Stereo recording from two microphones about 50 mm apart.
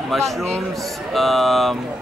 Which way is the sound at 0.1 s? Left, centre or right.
Centre.